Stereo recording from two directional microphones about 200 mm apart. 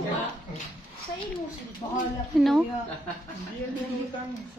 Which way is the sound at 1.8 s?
20° left (ahead or behind).